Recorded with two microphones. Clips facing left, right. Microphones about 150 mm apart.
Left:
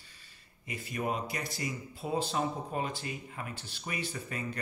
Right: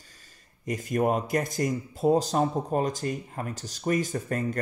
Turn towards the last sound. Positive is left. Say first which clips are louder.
# right 8 dB
turn(degrees=-45)  # may be behind; listen again after turning